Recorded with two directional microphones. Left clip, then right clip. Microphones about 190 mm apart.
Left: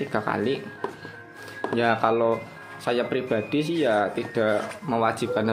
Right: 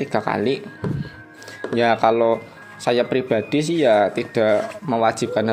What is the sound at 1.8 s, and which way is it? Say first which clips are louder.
Speech: right 5 dB; 30° right (ahead or behind).